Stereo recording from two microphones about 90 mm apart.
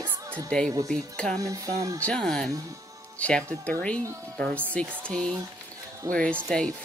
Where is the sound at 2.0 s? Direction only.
10° left (ahead or behind).